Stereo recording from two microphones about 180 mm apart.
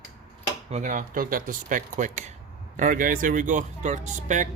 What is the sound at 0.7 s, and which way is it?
Speech, 40° right (ahead or behind).